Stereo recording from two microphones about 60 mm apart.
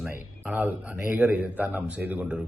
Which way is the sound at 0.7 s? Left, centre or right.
Right.